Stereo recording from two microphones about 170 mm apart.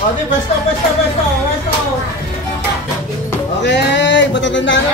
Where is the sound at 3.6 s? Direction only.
90° left.